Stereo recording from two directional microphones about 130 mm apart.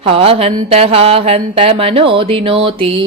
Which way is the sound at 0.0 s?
50° right (ahead or behind).